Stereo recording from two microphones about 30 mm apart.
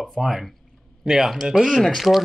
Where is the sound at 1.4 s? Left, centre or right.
Right.